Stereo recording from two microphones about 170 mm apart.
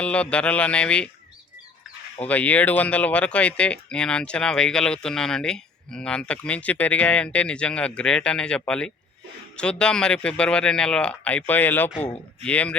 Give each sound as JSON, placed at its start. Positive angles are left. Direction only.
{"t": 0.0, "sound": "speech", "side_deg": 5}
{"t": 2.2, "sound": "speech", "side_deg": 10}